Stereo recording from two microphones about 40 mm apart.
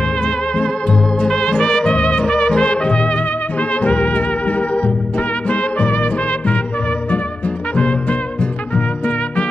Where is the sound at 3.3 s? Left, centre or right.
Left.